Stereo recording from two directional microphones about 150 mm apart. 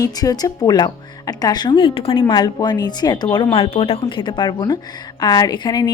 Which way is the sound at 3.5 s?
40° left (ahead or behind).